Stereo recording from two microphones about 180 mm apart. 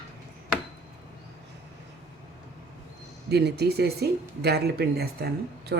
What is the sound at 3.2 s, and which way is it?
Speech, 65° right (ahead or behind).